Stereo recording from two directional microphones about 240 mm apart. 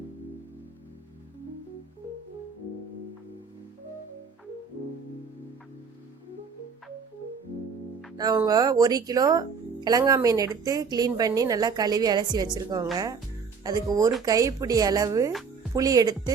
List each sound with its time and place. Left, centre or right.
8.1 s speech: centre